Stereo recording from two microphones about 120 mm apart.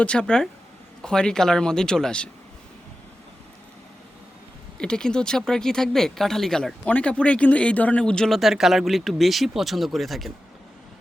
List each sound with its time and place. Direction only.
0.0 s speech: 10° left (ahead or behind)
4.8 s speech: 5° left (ahead or behind)